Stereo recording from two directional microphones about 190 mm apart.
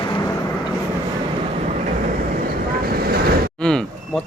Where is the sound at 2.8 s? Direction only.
50° right (ahead or behind).